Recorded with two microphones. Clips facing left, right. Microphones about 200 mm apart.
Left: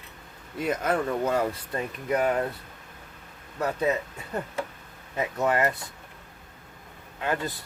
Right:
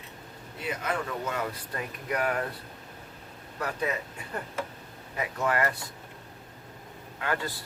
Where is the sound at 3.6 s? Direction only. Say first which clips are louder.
Left 5 dB; 25° left (ahead or behind).